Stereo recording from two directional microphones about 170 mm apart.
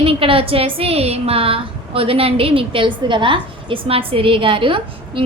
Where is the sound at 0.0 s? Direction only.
35° right (ahead or behind).